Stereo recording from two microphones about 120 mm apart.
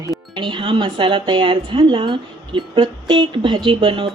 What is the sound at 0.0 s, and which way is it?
A woman's voice, 35° right (ahead or behind).